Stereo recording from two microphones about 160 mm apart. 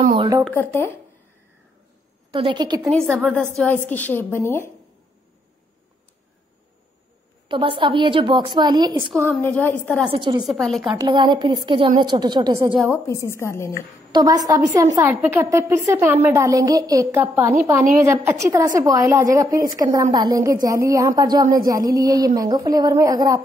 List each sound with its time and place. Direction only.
0.5 s a woman's voice: 15° left (ahead or behind)
2.3 s a woman's voice: 30° right (ahead or behind)
2.9 s a woman's voice: 5° left (ahead or behind)
7.4 s a woman's voice: 30° right (ahead or behind)
9.4 s a woman's voice: 10° left (ahead or behind)
10.1 s a woman's voice: 30° right (ahead or behind)
10.4 s a woman's voice: centre (ahead or behind)
10.8 s a woman's voice: 25° right (ahead or behind)
12.9 s a woman's voice: 20° left (ahead or behind)
14.1 s a woman's voice: 25° right (ahead or behind)